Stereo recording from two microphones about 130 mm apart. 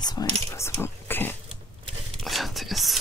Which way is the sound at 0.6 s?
15° left (ahead or behind).